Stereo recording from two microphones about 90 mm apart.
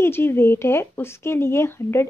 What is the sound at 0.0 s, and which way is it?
A woman's voice, 25° left (ahead or behind).